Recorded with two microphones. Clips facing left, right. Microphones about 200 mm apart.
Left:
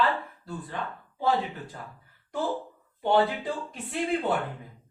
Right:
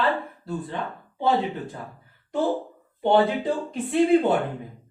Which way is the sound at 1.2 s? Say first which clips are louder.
Right 4 dB; 25° right (ahead or behind).